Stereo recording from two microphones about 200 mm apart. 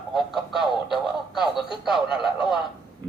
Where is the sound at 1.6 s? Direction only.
25° left (ahead or behind).